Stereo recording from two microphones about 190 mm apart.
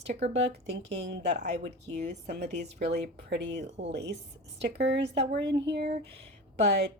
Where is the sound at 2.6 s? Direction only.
60° right (ahead or behind).